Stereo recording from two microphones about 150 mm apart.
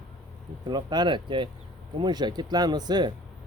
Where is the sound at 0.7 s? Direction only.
30° right (ahead or behind).